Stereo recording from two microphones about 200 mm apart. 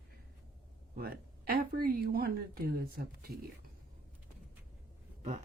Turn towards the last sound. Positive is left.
turn(degrees=-35)  # may be behind; listen again after turning